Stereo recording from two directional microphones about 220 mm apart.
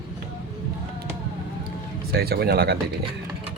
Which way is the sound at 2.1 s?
45° right (ahead or behind).